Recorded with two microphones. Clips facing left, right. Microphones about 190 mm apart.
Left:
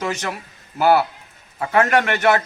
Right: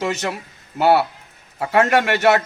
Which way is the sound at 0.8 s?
25° right (ahead or behind).